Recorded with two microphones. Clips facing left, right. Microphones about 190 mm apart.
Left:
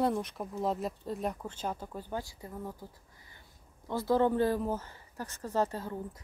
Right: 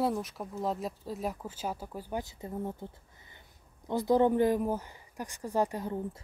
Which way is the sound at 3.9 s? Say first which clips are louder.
Right 2 dB; 20° right (ahead or behind).